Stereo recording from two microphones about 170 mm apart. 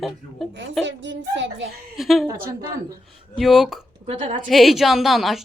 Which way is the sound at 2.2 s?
20° right (ahead or behind).